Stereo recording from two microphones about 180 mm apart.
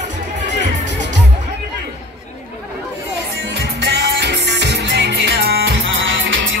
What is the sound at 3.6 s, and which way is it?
Music, 70° right (ahead or behind).